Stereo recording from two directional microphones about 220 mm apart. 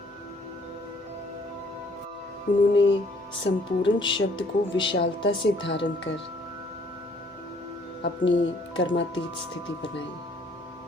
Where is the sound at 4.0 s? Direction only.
20° left (ahead or behind).